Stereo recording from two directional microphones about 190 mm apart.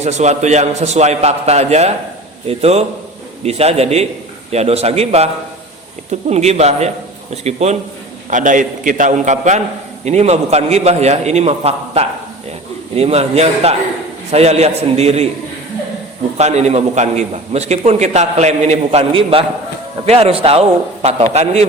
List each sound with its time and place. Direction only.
0.0 s a man's voice: 35° right (ahead or behind)
16.4 s a man's voice: 35° right (ahead or behind)